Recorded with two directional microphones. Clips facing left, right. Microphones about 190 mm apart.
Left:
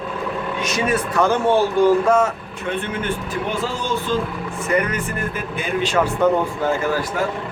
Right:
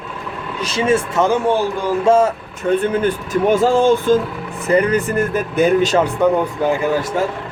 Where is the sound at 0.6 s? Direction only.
30° right (ahead or behind).